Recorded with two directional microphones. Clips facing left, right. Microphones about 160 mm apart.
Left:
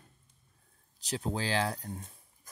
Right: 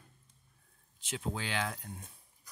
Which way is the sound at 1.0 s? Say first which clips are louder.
Left 4 dB; 35° left (ahead or behind).